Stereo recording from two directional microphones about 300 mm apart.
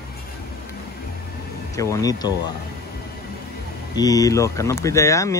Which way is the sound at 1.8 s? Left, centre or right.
Centre.